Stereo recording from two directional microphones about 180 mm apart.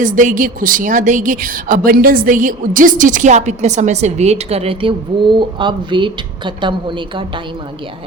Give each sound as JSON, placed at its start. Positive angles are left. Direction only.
{"t": 0.0, "sound": "a woman's voice", "side_deg": -45}